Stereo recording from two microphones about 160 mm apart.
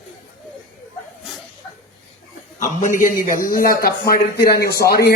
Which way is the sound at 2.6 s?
55° left (ahead or behind).